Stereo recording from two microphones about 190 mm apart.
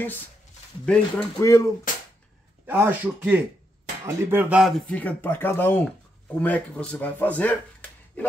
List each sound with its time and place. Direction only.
0.8 s speech: 5° left (ahead or behind)
2.6 s speech: 10° right (ahead or behind); by 7.5 s 10° left (ahead or behind)